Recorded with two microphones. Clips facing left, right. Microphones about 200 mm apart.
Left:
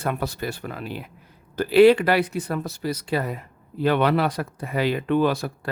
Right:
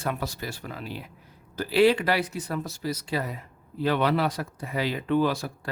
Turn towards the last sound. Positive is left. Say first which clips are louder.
# left 3 dB
turn(degrees=60)  # may be behind; listen again after turning